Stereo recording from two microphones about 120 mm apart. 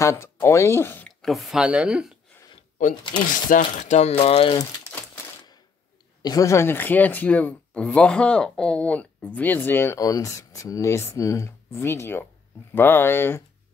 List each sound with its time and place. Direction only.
0.0 s speech: 25° left (ahead or behind)
1.2 s speech: centre (ahead or behind)
2.9 s speech: 40° left (ahead or behind)
3.4 s speech: 90° left; by 4.6 s 55° left (ahead or behind)
6.2 s speech: 30° left (ahead or behind)
9.9 s speech: 30° left (ahead or behind)